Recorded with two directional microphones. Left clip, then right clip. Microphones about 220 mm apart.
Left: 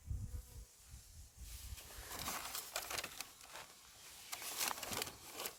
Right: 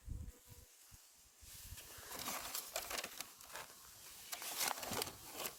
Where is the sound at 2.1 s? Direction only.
20° right (ahead or behind).